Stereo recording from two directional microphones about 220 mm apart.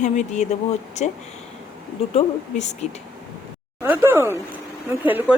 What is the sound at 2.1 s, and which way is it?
Speech, 30° left (ahead or behind).